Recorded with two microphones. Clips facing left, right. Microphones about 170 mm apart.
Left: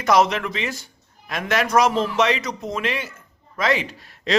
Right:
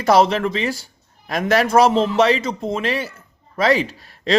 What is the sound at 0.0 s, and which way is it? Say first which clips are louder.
Speech: right 3 dB; 30° right (ahead or behind).